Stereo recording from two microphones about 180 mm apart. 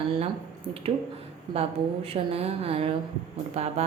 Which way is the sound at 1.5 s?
35° right (ahead or behind).